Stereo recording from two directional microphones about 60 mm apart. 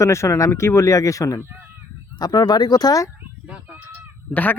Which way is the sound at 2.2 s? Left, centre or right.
Left.